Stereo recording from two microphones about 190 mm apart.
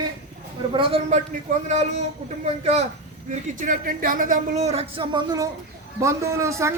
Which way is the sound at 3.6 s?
45° right (ahead or behind).